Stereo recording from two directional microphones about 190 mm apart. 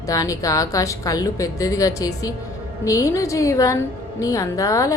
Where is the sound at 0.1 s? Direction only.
15° left (ahead or behind).